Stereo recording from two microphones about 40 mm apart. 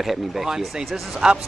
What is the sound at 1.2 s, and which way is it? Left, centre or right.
Speech, centre.